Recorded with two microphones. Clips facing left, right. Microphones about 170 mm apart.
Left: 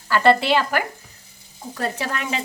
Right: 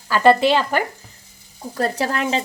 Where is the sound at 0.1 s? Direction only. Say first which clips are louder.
Right 2 dB; 15° right (ahead or behind).